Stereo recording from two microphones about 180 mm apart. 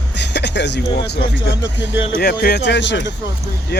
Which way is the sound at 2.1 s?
60° left (ahead or behind).